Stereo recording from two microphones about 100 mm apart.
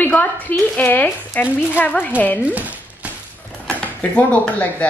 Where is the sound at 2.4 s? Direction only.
15° right (ahead or behind).